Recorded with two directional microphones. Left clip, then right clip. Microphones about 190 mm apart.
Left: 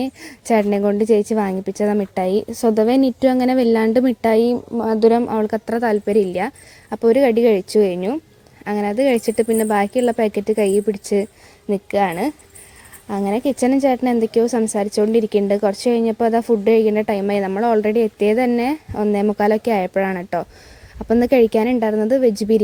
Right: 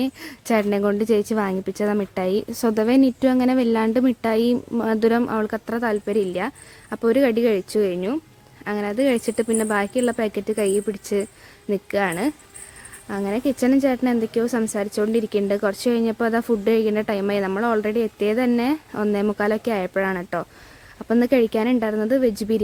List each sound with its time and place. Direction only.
0.0 s a woman's voice: 10° left (ahead or behind)